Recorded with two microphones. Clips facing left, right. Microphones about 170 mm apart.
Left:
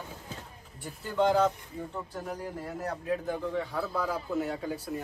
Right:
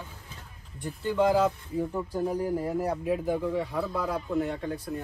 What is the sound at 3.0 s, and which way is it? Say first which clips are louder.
Speech: right 4 dB; 5° right (ahead or behind).